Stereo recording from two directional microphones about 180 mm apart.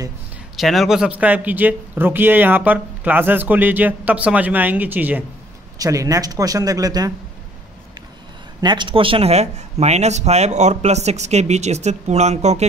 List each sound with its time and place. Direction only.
0.6 s speech: centre (ahead or behind); by 7.1 s 20° right (ahead or behind)
8.5 s speech: 25° right (ahead or behind)